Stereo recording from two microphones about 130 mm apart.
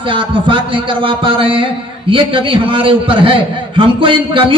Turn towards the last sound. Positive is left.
turn(degrees=-40)  # may be behind; listen again after turning